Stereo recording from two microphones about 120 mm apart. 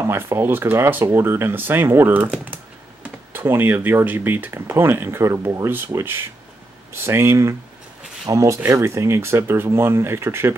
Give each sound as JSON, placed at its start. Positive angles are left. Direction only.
{"t": 0.0, "sound": "speech", "side_deg": -20}